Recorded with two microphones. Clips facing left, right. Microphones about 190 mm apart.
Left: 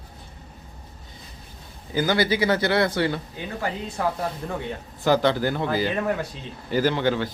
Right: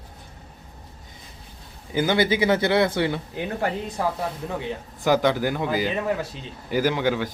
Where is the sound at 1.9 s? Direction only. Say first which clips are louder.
Right 1 dB; 20° right (ahead or behind).